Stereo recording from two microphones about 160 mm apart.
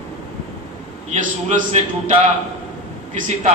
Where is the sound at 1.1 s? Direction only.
50° right (ahead or behind).